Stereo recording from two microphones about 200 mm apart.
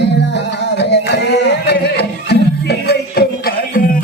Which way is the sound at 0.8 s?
60° left (ahead or behind).